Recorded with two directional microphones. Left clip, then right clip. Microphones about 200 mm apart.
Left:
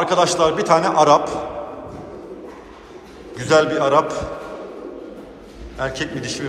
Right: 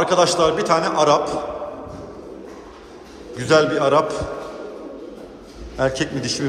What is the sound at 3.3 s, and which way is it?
Speech, 20° right (ahead or behind).